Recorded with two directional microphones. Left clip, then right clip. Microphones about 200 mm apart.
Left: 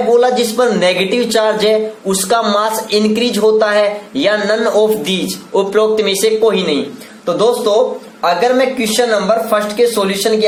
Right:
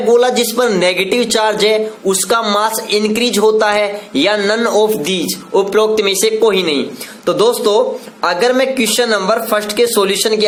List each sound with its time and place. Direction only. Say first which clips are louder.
0.1 s speech: right 1 dB; 35° right (ahead or behind)